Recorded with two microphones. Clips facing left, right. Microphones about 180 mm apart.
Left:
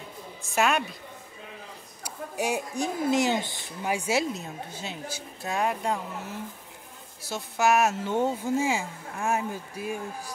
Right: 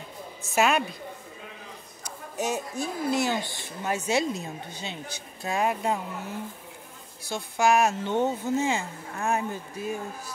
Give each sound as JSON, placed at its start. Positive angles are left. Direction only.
{"t": 0.4, "sound": "a woman's voice", "side_deg": 0}
{"t": 2.0, "sound": "speech", "side_deg": 10}